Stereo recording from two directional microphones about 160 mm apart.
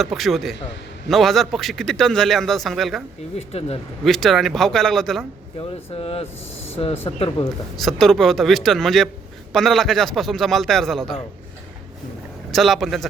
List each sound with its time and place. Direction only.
0.0 s a man's voice: centre (ahead or behind)
3.3 s speech: 40° left (ahead or behind)
4.0 s a man's voice: centre (ahead or behind)
5.5 s speech: 35° left (ahead or behind)
7.8 s a man's voice: centre (ahead or behind)
12.5 s a man's voice: centre (ahead or behind)